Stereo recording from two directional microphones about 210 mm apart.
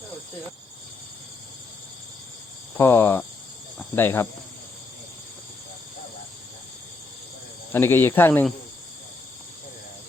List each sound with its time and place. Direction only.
2.7 s speech: 10° left (ahead or behind)
7.7 s speech: 10° left (ahead or behind)